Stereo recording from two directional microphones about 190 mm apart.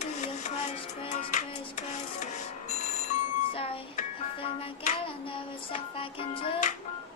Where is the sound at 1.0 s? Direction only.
35° left (ahead or behind).